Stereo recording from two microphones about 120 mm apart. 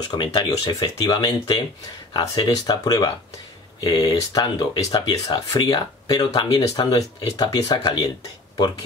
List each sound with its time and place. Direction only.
0.2 s speech: 35° left (ahead or behind)